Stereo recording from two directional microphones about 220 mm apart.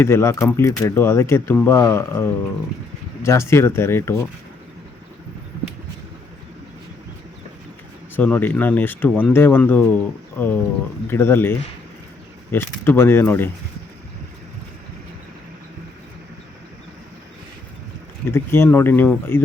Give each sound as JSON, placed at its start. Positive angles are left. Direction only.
{"t": 0.0, "sound": "speech", "side_deg": 10}
{"t": 8.1, "sound": "speech", "side_deg": 5}
{"t": 18.3, "sound": "speech", "side_deg": 10}